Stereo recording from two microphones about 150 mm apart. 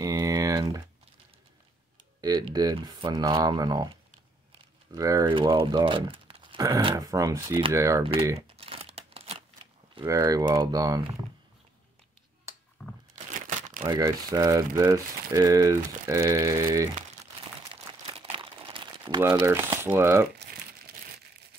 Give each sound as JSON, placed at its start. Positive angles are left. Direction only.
{"t": 0.0, "sound": "typing", "side_deg": -25}
{"t": 2.2, "sound": "speech", "side_deg": -25}
{"t": 4.9, "sound": "speech", "side_deg": -25}
{"t": 6.6, "sound": "speech", "side_deg": -25}
{"t": 8.4, "sound": "crumpling", "side_deg": -40}
{"t": 10.0, "sound": "speech", "side_deg": -20}
{"t": 12.8, "sound": "crunch", "side_deg": 0}
{"t": 13.1, "sound": "crumpling", "side_deg": -55}
{"t": 13.8, "sound": "speech", "side_deg": -25}
{"t": 18.1, "sound": "crumpling", "side_deg": -35}
{"t": 19.2, "sound": "speech", "side_deg": -15}
{"t": 20.5, "sound": "crumpling", "side_deg": -80}